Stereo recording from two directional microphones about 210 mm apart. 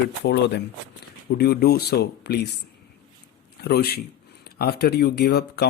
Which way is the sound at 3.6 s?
50° left (ahead or behind).